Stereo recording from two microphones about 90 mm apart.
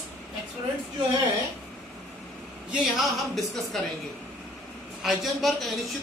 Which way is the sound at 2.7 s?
Centre (ahead or behind).